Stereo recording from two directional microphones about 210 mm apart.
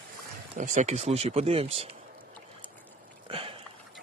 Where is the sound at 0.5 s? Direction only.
35° right (ahead or behind).